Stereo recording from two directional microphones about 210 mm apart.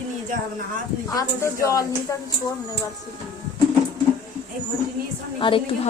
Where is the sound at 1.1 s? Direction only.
15° left (ahead or behind).